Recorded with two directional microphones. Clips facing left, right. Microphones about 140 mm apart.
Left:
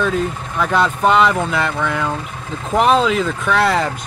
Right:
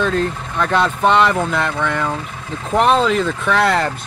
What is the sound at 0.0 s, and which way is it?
Speech, 5° left (ahead or behind).